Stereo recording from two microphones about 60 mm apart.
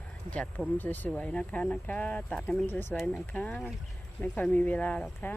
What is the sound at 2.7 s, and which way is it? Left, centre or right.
Speech, left.